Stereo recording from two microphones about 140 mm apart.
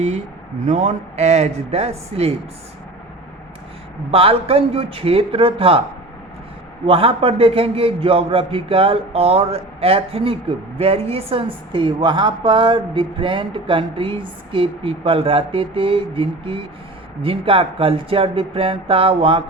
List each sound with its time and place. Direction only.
0.7 s speech: 55° right (ahead or behind)
4.1 s a woman's voice: 40° right (ahead or behind)
6.8 s a woman's voice: 40° right (ahead or behind)